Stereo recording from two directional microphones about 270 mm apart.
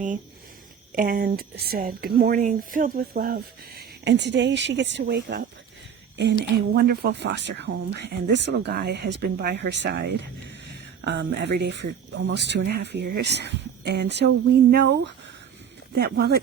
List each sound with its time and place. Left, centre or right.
0.9 s speech: right
6.7 s speech: right